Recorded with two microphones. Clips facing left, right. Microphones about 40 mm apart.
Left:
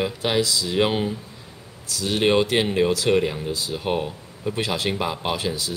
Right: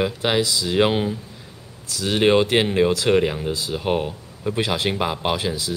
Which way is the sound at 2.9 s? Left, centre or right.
Right.